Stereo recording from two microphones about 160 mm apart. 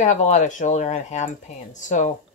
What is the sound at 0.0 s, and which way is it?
A woman's voice, 50° left (ahead or behind).